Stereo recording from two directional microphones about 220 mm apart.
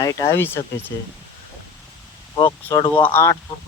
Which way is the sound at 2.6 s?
15° left (ahead or behind).